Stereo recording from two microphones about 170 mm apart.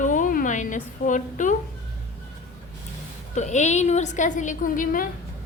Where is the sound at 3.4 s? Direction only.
45° left (ahead or behind).